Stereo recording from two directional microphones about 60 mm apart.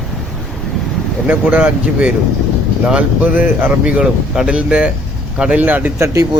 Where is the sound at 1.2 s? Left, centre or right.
Right.